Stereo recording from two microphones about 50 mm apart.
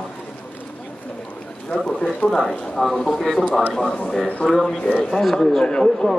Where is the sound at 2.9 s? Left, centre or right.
Centre.